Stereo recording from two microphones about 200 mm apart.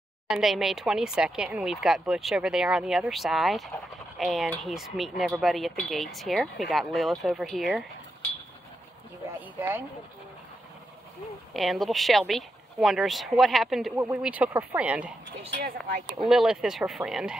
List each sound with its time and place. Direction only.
0.3 s speech: centre (ahead or behind)
9.6 s speech: 10° right (ahead or behind)
11.5 s speech: centre (ahead or behind)
15.5 s speech: 45° right (ahead or behind)
16.3 s speech: 5° right (ahead or behind)